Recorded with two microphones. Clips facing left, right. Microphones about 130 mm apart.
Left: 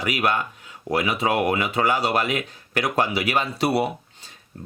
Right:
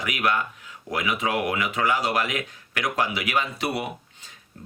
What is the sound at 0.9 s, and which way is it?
Speech, 30° left (ahead or behind).